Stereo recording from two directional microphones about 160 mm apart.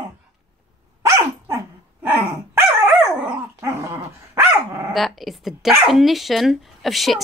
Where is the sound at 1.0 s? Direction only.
15° right (ahead or behind).